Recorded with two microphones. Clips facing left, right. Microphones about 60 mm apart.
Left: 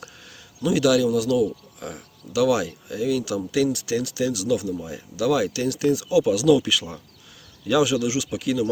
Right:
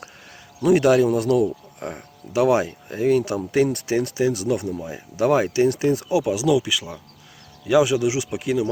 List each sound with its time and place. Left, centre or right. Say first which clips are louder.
0.6 s speech: right 3 dB; right